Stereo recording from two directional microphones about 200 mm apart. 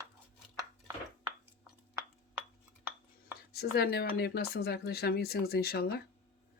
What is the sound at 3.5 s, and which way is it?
Speech, 50° left (ahead or behind).